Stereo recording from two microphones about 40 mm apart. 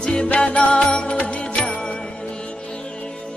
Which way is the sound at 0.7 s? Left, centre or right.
Left.